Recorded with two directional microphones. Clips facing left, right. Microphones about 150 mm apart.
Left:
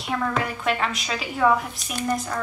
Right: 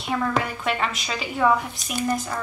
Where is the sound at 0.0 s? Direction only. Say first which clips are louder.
Right 1 dB; centre (ahead or behind).